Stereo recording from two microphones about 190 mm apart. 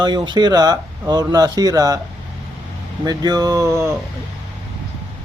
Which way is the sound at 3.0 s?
20° right (ahead or behind).